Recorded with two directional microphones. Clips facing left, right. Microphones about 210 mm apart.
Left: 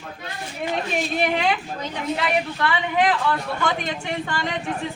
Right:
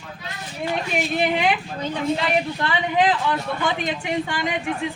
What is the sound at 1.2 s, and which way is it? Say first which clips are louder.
Speech: right 1 dB; 15° right (ahead or behind).